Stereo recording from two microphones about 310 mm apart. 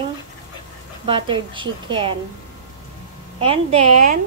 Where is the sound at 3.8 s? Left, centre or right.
Right.